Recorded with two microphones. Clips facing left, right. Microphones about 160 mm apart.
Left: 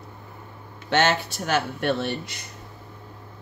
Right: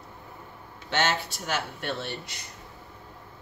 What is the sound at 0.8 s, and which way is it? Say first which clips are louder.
Speech: left 5 dB; 65° left (ahead or behind).